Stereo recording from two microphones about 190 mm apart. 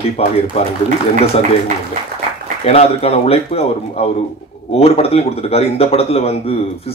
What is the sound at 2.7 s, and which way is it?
Speech, 30° left (ahead or behind).